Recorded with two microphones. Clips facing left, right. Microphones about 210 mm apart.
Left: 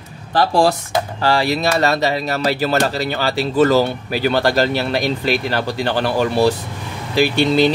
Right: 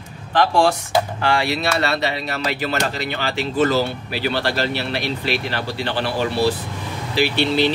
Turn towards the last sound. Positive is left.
turn(degrees=45)  # may be behind; listen again after turning